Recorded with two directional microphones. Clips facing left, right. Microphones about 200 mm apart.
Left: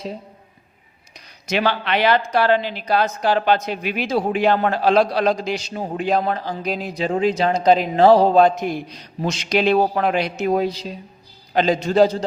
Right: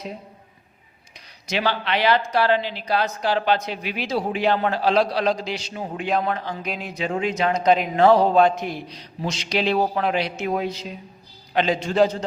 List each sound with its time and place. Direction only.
1.5 s a man's voice: 55° left (ahead or behind); by 12.2 s 35° left (ahead or behind)